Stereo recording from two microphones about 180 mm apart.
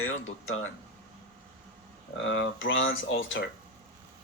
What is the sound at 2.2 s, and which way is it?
Speech, 90° left.